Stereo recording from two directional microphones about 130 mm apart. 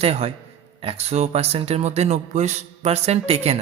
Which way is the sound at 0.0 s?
50° right (ahead or behind).